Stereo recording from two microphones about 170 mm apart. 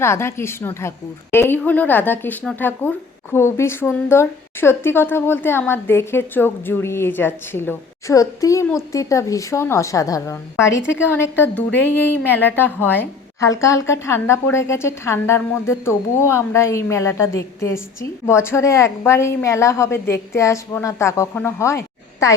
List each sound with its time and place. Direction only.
0.0 s a woman's voice: 15° left (ahead or behind)